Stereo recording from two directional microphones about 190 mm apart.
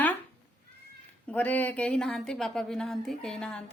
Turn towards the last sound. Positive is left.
turn(degrees=5)  # may be behind; listen again after turning